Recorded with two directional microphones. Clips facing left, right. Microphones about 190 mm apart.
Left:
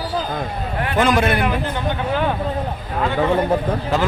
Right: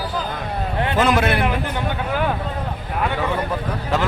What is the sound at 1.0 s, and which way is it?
Speech, 5° right (ahead or behind).